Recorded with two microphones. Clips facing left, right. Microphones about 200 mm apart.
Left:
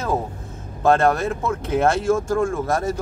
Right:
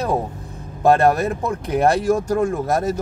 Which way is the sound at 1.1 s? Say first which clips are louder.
Right 2 dB; 15° right (ahead or behind).